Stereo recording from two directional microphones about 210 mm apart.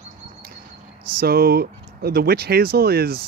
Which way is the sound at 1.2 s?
45° right (ahead or behind).